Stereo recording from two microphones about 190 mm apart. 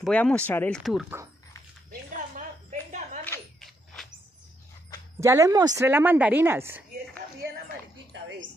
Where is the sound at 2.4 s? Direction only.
40° right (ahead or behind).